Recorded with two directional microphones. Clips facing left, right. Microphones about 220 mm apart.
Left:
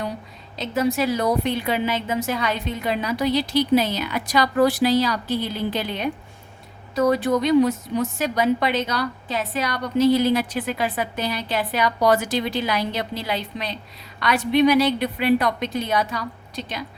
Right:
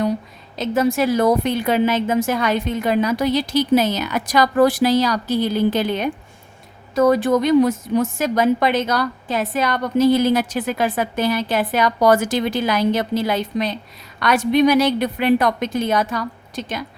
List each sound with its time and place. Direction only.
0.6 s a woman's voice: 50° right (ahead or behind)
7.1 s a woman's voice: 45° right (ahead or behind)